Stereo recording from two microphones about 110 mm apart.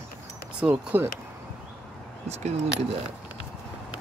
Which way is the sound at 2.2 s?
80° right.